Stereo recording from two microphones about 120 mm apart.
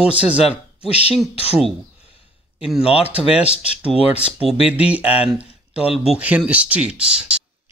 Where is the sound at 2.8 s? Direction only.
50° left (ahead or behind).